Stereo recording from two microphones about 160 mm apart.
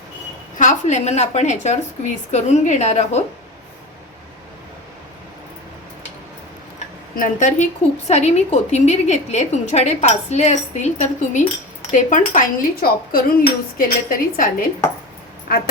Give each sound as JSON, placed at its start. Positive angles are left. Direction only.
{"t": 0.6, "sound": "a woman's voice", "side_deg": 50}
{"t": 7.2, "sound": "a woman's voice", "side_deg": 50}
{"t": 11.9, "sound": "cutlery", "side_deg": 50}
{"t": 15.5, "sound": "a woman's voice", "side_deg": 70}